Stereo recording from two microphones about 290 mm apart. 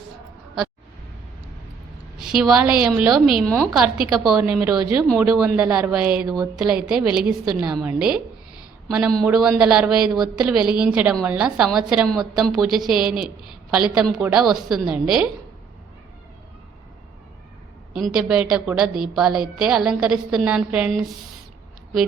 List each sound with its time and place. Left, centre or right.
2.2 s a woman's voice: centre
17.9 s a woman's voice: centre